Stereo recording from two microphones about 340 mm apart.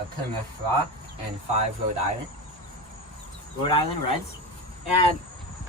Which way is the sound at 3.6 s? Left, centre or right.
Centre.